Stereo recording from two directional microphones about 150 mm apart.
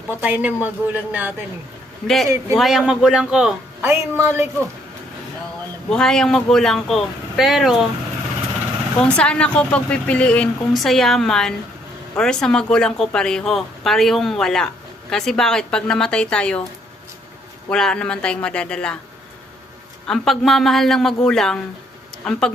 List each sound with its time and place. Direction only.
0.2 s a woman's voice: 10° right (ahead or behind)
2.6 s speech: centre (ahead or behind)
5.9 s speech: 5° left (ahead or behind)
9.0 s speech: 5° left (ahead or behind)
17.7 s speech: 5° left (ahead or behind)
20.1 s speech: centre (ahead or behind)